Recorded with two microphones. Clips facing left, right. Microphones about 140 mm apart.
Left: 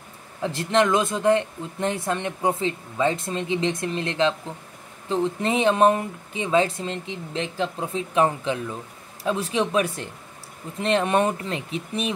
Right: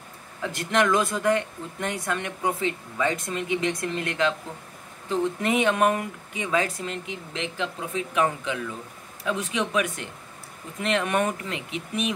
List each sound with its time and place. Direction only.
0.4 s speech: 30° left (ahead or behind)